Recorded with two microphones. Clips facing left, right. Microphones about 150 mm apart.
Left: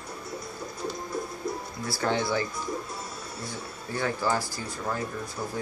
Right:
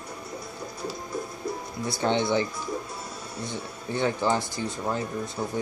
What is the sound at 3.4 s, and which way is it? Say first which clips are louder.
Speech: right 6 dB; 20° right (ahead or behind).